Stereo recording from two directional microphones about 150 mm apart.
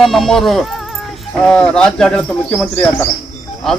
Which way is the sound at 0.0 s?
Centre (ahead or behind).